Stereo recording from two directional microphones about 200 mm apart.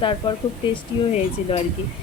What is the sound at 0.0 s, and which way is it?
Speech, 25° left (ahead or behind).